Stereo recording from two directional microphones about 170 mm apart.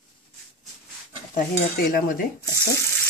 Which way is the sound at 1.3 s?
55° left (ahead or behind).